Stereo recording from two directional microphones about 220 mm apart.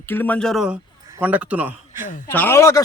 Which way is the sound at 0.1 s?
10° left (ahead or behind).